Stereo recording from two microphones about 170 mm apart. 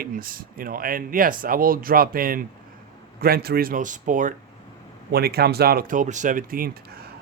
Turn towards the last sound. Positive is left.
turn(degrees=-60)  # may be behind; listen again after turning